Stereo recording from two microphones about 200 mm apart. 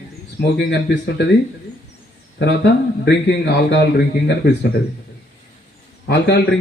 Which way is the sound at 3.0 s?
60° left (ahead or behind).